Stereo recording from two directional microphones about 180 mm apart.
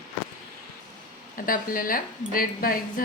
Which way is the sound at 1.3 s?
50° left (ahead or behind).